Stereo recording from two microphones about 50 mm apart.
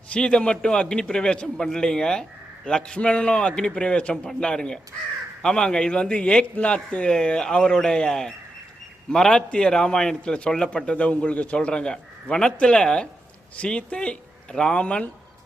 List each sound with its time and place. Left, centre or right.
0.1 s a man's voice: centre